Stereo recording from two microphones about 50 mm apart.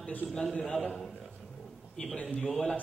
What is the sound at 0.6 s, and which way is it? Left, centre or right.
Speech, centre.